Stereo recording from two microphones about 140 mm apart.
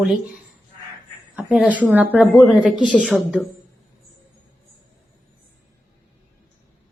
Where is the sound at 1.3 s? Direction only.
5° right (ahead or behind).